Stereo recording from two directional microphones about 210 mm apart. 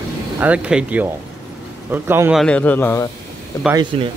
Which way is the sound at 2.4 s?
5° left (ahead or behind).